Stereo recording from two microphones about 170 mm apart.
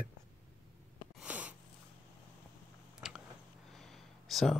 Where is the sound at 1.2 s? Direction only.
10° right (ahead or behind).